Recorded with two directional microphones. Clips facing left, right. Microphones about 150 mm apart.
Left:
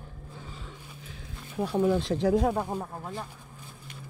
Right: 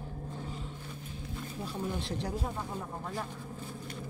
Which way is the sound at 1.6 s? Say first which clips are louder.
Left 12 dB; 80° left.